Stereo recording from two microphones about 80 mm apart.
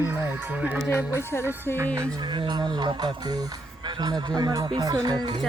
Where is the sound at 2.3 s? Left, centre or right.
Right.